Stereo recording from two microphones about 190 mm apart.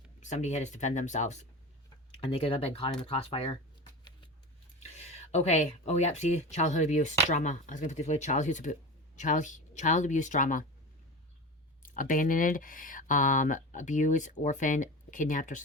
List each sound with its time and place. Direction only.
0.2 s speech: 40° left (ahead or behind)
4.8 s speech: 35° left (ahead or behind)
11.8 s speech: 45° left (ahead or behind)